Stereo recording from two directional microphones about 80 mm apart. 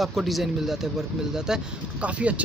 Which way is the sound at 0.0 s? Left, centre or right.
Centre.